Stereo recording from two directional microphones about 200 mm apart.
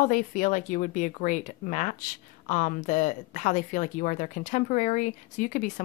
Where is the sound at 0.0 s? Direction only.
40° left (ahead or behind).